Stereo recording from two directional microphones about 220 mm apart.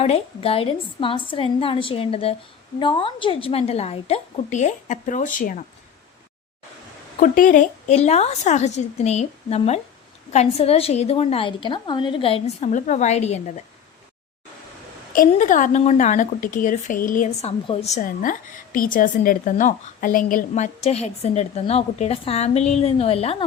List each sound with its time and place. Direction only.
0.0 s a woman's voice: 25° left (ahead or behind)
7.2 s a woman's voice: 35° left (ahead or behind)
15.1 s a woman's voice: 35° left (ahead or behind)